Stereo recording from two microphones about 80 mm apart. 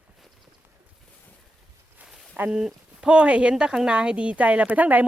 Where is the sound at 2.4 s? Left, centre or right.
Centre.